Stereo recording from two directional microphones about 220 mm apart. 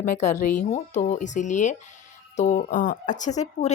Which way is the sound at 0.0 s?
35° left (ahead or behind).